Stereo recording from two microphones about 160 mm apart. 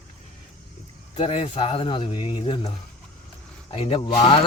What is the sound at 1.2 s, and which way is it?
Speech, 35° left (ahead or behind).